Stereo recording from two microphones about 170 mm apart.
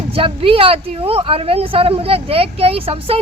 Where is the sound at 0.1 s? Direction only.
35° right (ahead or behind).